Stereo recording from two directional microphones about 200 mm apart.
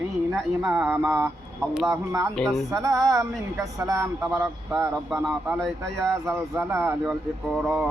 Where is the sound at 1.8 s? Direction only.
15° right (ahead or behind).